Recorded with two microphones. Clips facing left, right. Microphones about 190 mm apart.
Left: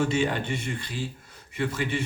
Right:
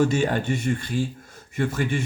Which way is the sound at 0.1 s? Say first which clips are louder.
Right 3 dB; 45° right (ahead or behind).